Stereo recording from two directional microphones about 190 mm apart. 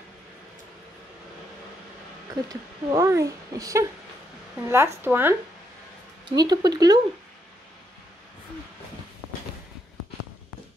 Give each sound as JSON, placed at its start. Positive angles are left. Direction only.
{"t": 2.4, "sound": "speech", "side_deg": -20}
{"t": 6.2, "sound": "speech", "side_deg": -20}